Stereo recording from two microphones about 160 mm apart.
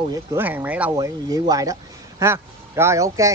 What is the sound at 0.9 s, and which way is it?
Speech, 20° right (ahead or behind).